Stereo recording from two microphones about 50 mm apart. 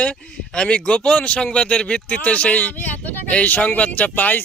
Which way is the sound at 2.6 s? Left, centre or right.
Left.